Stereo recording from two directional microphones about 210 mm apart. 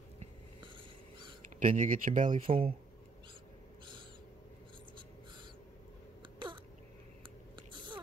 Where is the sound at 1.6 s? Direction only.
40° right (ahead or behind).